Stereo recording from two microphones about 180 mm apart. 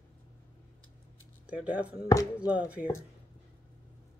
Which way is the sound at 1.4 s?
10° right (ahead or behind).